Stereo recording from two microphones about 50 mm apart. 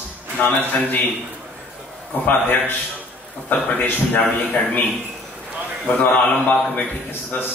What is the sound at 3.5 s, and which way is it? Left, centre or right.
Speech, left.